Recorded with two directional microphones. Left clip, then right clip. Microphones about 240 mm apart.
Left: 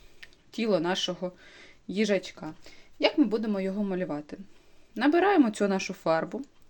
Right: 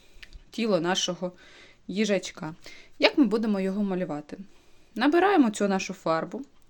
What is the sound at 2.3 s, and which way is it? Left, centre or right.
Speech, right.